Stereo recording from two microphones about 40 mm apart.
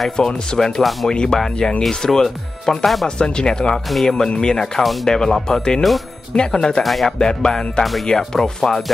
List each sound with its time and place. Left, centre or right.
0.2 s speech: centre
1.0 s music: centre
2.0 s speech: centre
3.2 s music: left
3.7 s speech: centre
4.3 s music: left
5.0 s speech: centre
6.3 s music: left
6.8 s speech: centre
7.2 s music: centre
8.3 s speech: centre